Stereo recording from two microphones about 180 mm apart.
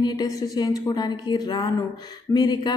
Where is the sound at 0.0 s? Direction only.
20° left (ahead or behind).